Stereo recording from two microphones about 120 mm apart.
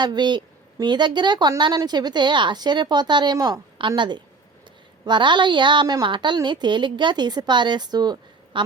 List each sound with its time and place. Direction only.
0.0 s a woman's voice: 40° right (ahead or behind)
3.8 s a woman's voice: 40° right (ahead or behind)